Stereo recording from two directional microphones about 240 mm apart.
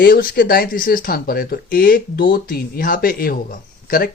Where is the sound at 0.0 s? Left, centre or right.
Left.